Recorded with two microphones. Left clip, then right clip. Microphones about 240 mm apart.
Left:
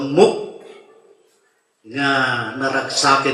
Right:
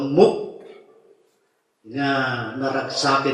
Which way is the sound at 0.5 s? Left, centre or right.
Centre.